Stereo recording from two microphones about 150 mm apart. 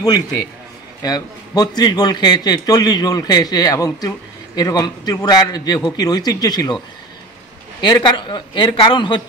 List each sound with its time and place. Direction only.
1.0 s a man's voice: 25° left (ahead or behind)
7.8 s a man's voice: 30° left (ahead or behind)